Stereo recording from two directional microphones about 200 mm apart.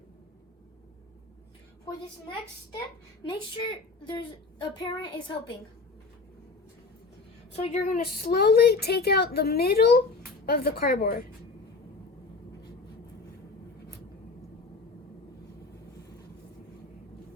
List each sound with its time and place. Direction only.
3.2 s a woman's voice: 20° left (ahead or behind)
7.5 s a woman's voice: 35° left (ahead or behind)